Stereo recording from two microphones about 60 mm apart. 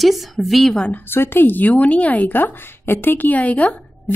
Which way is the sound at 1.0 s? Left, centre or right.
Left.